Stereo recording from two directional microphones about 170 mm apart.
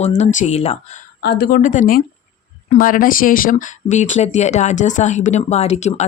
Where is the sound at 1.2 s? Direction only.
70° left (ahead or behind).